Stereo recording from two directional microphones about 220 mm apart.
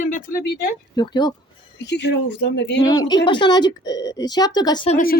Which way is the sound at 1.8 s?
50° left (ahead or behind).